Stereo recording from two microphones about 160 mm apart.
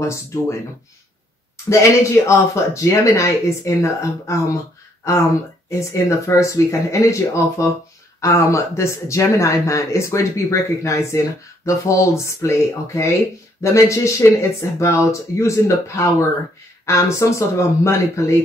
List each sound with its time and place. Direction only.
0.0 s speech: 20° left (ahead or behind)
1.7 s speech: 20° left (ahead or behind)